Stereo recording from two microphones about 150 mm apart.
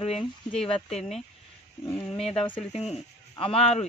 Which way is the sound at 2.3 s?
40° left (ahead or behind).